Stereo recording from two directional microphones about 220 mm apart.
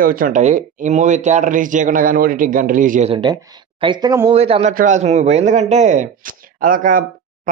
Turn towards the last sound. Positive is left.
turn(degrees=-40)  # may be behind; listen again after turning